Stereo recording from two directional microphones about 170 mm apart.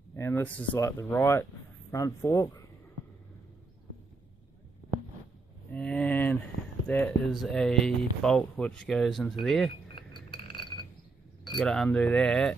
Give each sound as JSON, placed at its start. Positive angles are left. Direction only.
{"t": 0.1, "sound": "speech", "side_deg": 15}
{"t": 5.7, "sound": "a sound", "side_deg": 5}
{"t": 6.9, "sound": "speech", "side_deg": 5}
{"t": 10.1, "sound": "chink", "side_deg": 30}
{"t": 11.5, "sound": "speech", "side_deg": 5}